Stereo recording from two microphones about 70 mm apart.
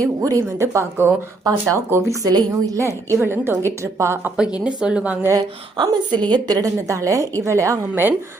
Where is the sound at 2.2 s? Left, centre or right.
Right.